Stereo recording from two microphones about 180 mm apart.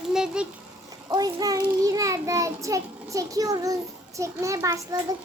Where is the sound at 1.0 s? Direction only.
20° right (ahead or behind).